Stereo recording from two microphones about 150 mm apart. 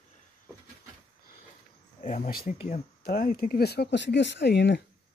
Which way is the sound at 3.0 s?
80° left.